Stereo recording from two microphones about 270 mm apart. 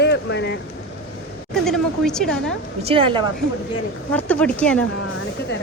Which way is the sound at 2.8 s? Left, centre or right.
Centre.